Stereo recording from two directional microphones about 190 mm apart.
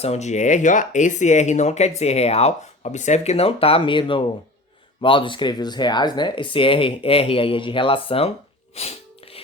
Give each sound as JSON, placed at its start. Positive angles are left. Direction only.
{"t": 0.0, "sound": "speech", "side_deg": 35}
{"t": 8.7, "sound": "sneeze", "side_deg": 30}